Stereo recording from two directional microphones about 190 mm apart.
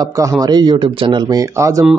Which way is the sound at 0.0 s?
15° right (ahead or behind).